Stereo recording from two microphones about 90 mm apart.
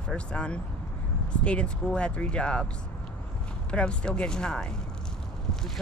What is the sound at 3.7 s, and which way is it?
Speech, 10° left (ahead or behind).